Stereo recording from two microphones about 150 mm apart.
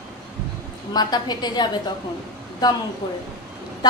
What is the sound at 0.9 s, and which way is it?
Speech, 25° left (ahead or behind).